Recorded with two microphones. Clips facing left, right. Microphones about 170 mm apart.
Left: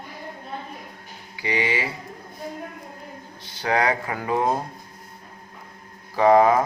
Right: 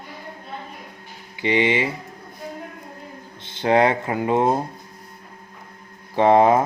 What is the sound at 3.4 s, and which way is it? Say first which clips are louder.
Speech: right 6 dB; 25° right (ahead or behind).